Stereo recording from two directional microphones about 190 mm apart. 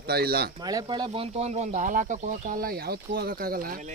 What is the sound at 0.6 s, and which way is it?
Speech, 20° right (ahead or behind).